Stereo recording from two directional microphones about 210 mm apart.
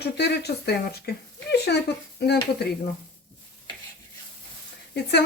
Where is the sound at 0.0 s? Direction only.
50° left (ahead or behind).